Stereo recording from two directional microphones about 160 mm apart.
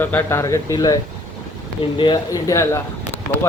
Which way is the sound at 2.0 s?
30° left (ahead or behind).